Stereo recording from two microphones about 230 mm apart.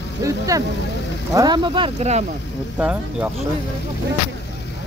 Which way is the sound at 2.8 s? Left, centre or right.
Centre.